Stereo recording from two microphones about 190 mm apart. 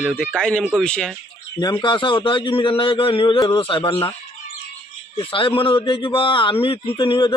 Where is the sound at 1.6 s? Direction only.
20° left (ahead or behind).